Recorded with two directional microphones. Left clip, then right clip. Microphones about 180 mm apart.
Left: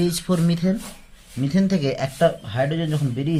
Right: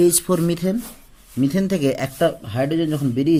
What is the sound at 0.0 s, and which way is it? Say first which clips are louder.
Speech: right 6 dB; 50° right (ahead or behind).